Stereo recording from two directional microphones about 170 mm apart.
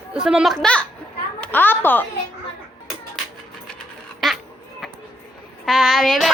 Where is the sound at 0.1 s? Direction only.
5° right (ahead or behind).